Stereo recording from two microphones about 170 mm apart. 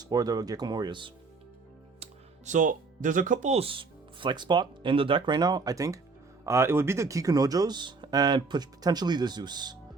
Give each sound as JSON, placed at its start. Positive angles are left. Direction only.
{"t": 0.0, "sound": "speech", "side_deg": -20}
{"t": 2.0, "sound": "speech", "side_deg": -45}